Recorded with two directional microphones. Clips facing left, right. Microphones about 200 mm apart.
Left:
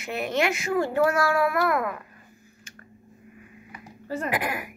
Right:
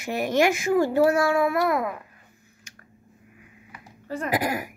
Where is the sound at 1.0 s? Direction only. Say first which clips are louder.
Right 2 dB; 25° right (ahead or behind).